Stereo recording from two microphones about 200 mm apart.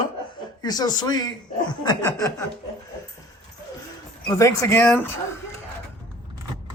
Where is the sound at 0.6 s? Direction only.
20° left (ahead or behind).